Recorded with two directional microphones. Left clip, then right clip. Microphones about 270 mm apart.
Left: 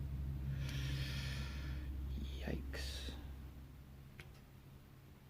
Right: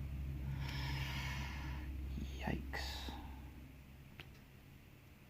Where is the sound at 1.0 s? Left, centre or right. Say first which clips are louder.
Right 3 dB; centre.